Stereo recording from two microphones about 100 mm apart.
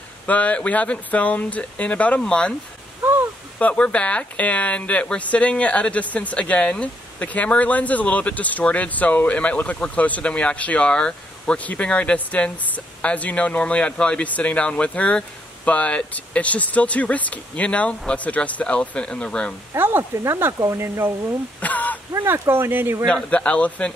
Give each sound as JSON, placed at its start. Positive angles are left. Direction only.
{"t": 0.3, "sound": "speech", "side_deg": 15}
{"t": 3.5, "sound": "speech", "side_deg": 10}
{"t": 19.7, "sound": "speech", "side_deg": -20}
{"t": 21.5, "sound": "speech", "side_deg": 15}
{"t": 22.1, "sound": "speech", "side_deg": -25}
{"t": 23.0, "sound": "speech", "side_deg": 10}